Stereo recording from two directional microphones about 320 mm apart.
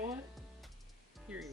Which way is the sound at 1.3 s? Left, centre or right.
Centre.